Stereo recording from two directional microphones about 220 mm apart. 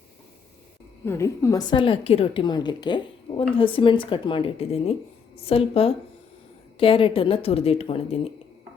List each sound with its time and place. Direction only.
1.0 s a woman's voice: 10° left (ahead or behind); by 8.3 s 25° left (ahead or behind)